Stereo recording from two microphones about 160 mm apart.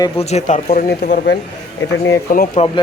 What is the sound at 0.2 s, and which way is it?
Speech, 45° left (ahead or behind).